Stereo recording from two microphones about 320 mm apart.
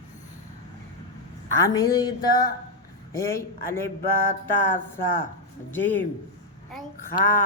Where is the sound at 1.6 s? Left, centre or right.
Centre.